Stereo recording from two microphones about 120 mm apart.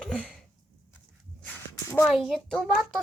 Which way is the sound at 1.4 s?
20° left (ahead or behind).